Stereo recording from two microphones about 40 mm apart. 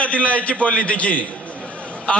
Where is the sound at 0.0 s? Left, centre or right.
Left.